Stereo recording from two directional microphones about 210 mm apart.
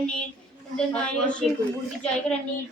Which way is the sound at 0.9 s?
5° left (ahead or behind).